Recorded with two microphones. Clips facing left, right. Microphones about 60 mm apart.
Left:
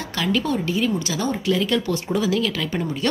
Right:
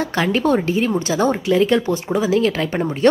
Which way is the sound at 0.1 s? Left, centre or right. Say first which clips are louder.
Right 3 dB; right.